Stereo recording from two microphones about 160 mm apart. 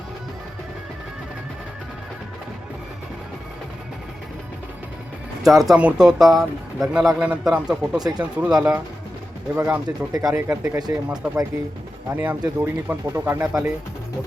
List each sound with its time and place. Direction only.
5.4 s speech: centre (ahead or behind)
7.9 s speech: 25° right (ahead or behind)
8.2 s speech: 5° right (ahead or behind)
10.1 s speech: 20° right (ahead or behind)
12.1 s speech: 10° right (ahead or behind)